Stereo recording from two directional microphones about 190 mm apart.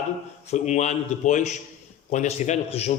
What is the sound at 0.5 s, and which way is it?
A man's voice, 40° left (ahead or behind).